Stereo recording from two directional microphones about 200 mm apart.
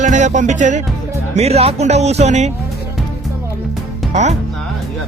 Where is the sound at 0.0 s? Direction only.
35° right (ahead or behind).